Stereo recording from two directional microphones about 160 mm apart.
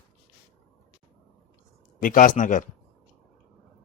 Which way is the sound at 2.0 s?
55° left (ahead or behind).